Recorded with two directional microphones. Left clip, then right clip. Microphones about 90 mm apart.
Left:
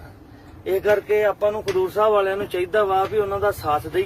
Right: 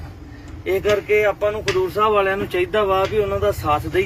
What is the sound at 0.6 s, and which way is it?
Speech, 30° left (ahead or behind).